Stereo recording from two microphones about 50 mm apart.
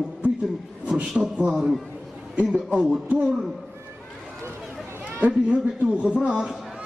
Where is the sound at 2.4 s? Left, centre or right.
Centre.